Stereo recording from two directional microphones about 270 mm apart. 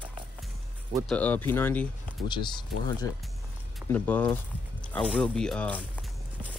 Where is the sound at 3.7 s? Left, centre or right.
Centre.